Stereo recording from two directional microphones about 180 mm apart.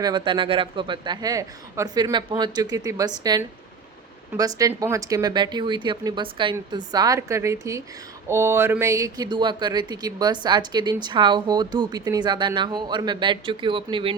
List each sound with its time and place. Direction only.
0.0 s speech: 25° right (ahead or behind)